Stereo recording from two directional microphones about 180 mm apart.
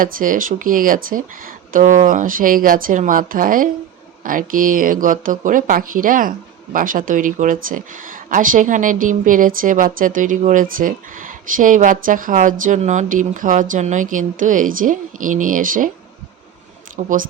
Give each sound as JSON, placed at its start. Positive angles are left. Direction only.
{"t": 0.0, "sound": "speech", "side_deg": -50}
{"t": 17.0, "sound": "speech", "side_deg": -40}